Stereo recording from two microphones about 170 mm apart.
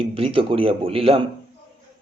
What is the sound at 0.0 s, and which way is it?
A man's voice, 30° right (ahead or behind).